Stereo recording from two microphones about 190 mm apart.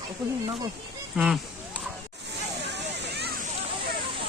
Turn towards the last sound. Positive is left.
turn(degrees=-55)  # may be behind; listen again after turning